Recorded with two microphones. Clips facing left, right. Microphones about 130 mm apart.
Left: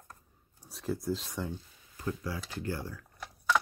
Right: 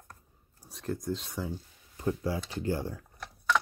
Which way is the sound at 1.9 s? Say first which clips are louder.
Right 5 dB; 25° right (ahead or behind).